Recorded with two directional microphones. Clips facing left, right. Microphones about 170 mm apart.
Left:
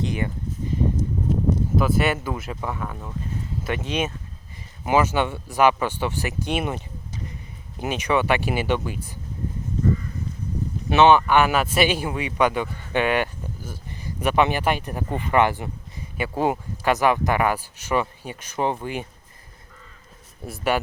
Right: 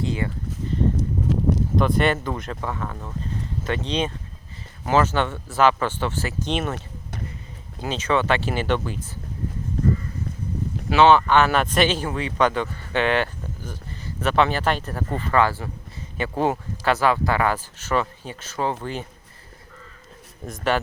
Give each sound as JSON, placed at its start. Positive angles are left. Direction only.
{"t": 0.0, "sound": "speech", "side_deg": 20}
{"t": 0.9, "sound": "a sound", "side_deg": -90}
{"t": 1.7, "sound": "speech", "side_deg": 5}
{"t": 10.8, "sound": "speech", "side_deg": 20}
{"t": 20.4, "sound": "speech", "side_deg": 10}